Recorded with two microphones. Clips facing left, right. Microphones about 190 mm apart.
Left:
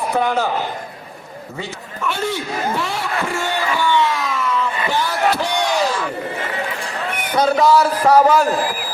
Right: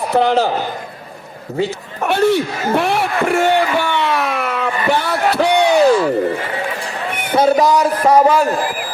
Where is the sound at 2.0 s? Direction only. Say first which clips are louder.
Right 9 dB; 65° right (ahead or behind).